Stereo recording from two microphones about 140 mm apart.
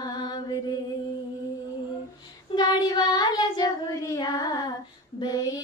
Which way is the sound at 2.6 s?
30° left (ahead or behind).